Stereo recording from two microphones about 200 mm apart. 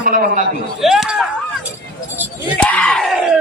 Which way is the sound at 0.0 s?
40° right (ahead or behind).